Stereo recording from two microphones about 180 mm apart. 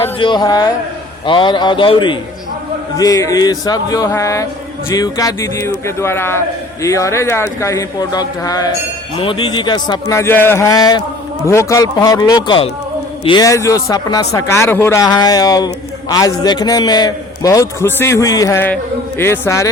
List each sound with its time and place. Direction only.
0.2 s speech: 25° left (ahead or behind)